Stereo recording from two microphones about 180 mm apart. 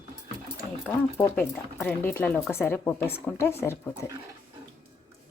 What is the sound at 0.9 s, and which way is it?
Speech, 15° left (ahead or behind).